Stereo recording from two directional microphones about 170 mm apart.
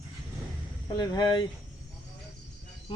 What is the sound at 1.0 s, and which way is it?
Speech, 25° left (ahead or behind).